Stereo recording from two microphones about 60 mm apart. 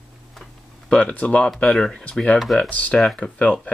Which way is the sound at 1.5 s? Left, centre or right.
Centre.